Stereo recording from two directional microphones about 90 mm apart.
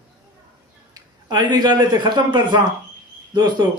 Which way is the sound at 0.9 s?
50° right (ahead or behind).